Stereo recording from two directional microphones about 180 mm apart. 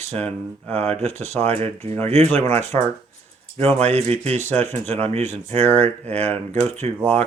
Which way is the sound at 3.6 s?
35° right (ahead or behind).